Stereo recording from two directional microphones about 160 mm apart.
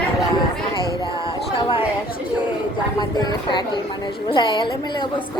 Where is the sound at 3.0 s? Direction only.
25° left (ahead or behind).